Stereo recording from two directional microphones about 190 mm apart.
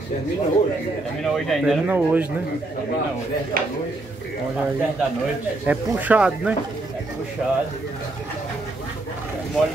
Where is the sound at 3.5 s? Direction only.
50° right (ahead or behind).